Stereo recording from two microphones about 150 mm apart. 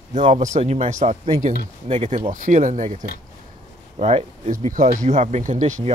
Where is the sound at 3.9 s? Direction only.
45° right (ahead or behind).